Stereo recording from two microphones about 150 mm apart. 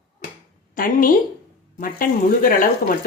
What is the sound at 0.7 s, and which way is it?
A woman's voice, 70° left (ahead or behind).